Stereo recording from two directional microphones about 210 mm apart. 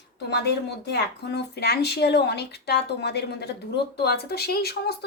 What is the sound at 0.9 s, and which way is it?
A woman's voice, 50° left (ahead or behind).